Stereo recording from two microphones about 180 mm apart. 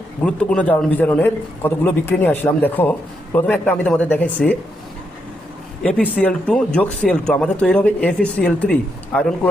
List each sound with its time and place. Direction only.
0.2 s speech: 5° left (ahead or behind)
6.1 s speech: 5° left (ahead or behind)